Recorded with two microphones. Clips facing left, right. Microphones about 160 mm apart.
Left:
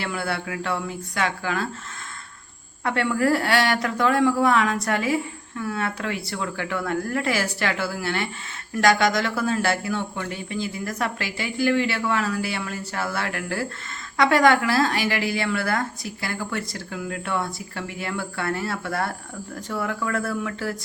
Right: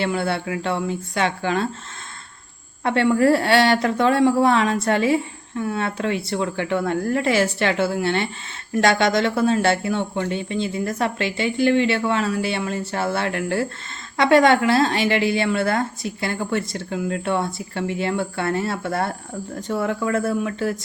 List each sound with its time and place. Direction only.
0.0 s a woman's voice: 25° right (ahead or behind)
2.8 s a woman's voice: 25° right (ahead or behind)